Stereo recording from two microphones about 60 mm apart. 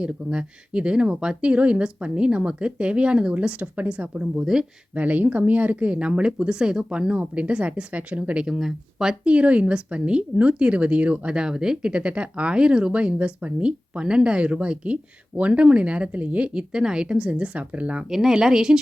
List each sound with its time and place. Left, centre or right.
0.0 s speech: centre
4.9 s a woman's voice: right; by 9.1 s centre
9.2 s a woman's voice: right
18.1 s speech: centre